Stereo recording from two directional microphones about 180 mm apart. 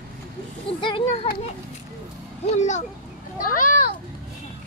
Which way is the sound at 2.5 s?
40° left (ahead or behind).